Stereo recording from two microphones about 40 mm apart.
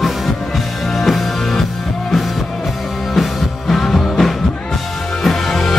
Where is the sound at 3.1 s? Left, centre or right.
Centre.